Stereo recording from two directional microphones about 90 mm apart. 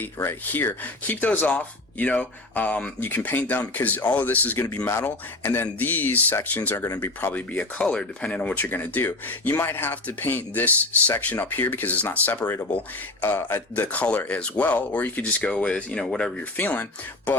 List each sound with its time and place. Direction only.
0.0 s speech: 25° left (ahead or behind)
4.9 s speech: 30° left (ahead or behind)
13.8 s speech: 15° left (ahead or behind)
16.4 s speech: 20° left (ahead or behind)